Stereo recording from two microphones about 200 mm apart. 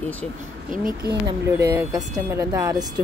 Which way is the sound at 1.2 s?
10° right (ahead or behind).